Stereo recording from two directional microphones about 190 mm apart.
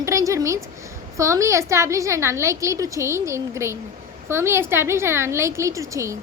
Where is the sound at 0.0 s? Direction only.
15° right (ahead or behind).